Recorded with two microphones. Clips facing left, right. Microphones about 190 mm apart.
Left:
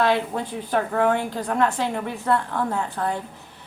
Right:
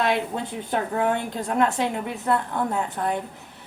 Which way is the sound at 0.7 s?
20° right (ahead or behind).